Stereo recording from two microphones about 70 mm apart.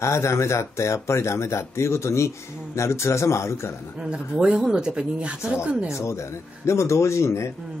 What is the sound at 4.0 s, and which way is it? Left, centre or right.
Speech, centre.